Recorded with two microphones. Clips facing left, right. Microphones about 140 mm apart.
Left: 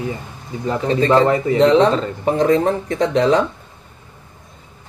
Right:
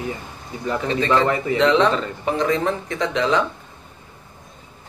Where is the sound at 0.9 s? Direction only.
40° left (ahead or behind).